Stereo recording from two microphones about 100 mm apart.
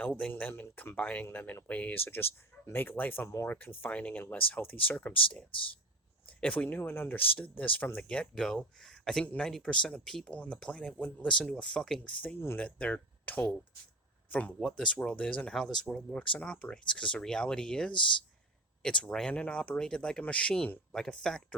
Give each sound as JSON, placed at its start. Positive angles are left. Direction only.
{"t": 0.0, "sound": "speech", "side_deg": 15}
{"t": 5.5, "sound": "speech", "side_deg": 60}
{"t": 6.2, "sound": "speech", "side_deg": 15}